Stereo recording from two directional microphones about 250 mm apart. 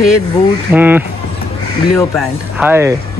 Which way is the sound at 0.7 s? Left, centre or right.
Centre.